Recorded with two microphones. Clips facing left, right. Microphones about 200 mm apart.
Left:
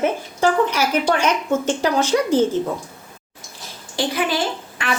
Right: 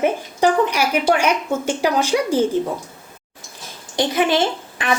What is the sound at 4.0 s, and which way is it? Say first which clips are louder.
Speech: right 4 dB; 20° right (ahead or behind).